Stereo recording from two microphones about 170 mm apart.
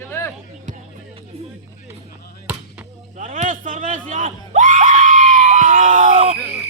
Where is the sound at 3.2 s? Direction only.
50° right (ahead or behind).